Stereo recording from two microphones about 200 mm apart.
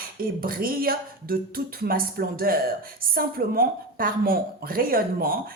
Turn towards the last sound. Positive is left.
turn(degrees=-45)  # may be behind; listen again after turning